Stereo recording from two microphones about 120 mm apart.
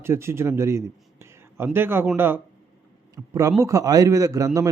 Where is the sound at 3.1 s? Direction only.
25° right (ahead or behind).